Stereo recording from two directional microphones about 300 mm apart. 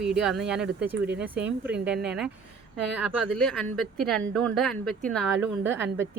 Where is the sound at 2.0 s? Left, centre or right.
Centre.